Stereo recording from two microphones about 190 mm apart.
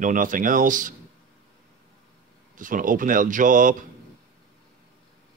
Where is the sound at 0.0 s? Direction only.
45° right (ahead or behind).